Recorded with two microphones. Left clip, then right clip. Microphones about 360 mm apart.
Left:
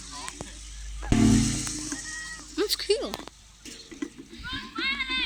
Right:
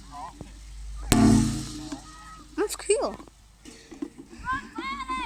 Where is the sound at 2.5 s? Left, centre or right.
Centre.